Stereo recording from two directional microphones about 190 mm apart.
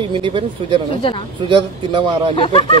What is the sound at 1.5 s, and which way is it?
Speech, 25° right (ahead or behind).